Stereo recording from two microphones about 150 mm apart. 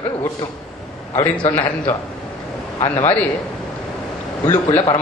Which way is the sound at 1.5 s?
15° left (ahead or behind).